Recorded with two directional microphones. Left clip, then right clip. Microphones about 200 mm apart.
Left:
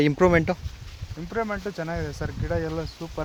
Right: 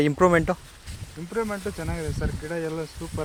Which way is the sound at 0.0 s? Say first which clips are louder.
Even; 10° left (ahead or behind).